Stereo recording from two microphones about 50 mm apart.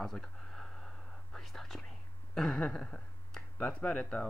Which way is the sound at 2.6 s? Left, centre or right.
Centre.